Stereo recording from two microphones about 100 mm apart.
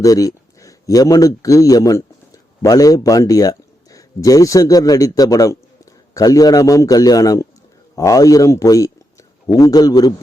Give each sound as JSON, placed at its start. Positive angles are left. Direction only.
{"t": 0.0, "sound": "a man's voice", "side_deg": 35}